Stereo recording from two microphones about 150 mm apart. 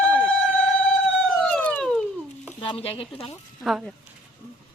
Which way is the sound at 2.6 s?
35° left (ahead or behind).